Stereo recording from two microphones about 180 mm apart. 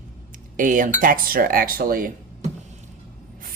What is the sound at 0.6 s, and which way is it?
Speech, 45° right (ahead or behind).